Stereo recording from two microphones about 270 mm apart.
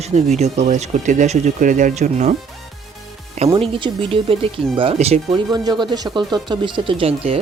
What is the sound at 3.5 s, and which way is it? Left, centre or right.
Speech, centre.